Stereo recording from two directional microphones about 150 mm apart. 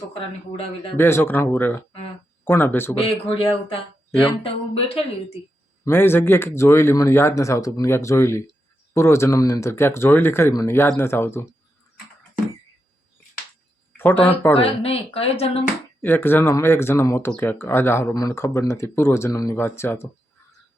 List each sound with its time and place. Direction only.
0.1 s speech: 35° left (ahead or behind)
0.9 s speech: 15° left (ahead or behind)
3.0 s speech: 35° left (ahead or behind)
5.8 s speech: 15° left (ahead or behind)
13.9 s speech: 15° left (ahead or behind)
14.5 s speech: 40° left (ahead or behind)
16.0 s speech: 15° left (ahead or behind)